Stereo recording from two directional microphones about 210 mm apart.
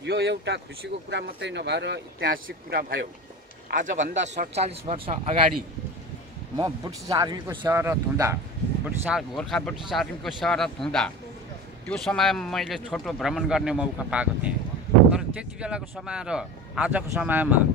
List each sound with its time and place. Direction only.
0.0 s speech: 55° right (ahead or behind); by 5.3 s 30° right (ahead or behind)
6.6 s a man's voice: 20° right (ahead or behind)
8.8 s a man's voice: centre (ahead or behind)